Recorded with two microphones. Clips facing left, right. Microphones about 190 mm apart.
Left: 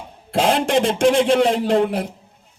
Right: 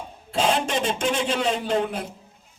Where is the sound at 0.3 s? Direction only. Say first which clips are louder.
Left 6 dB; 90° left.